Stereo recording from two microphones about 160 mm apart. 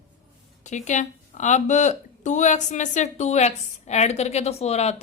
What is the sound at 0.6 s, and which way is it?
A woman's voice, 50° left (ahead or behind).